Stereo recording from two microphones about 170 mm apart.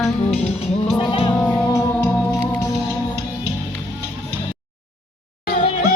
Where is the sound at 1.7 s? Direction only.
20° left (ahead or behind).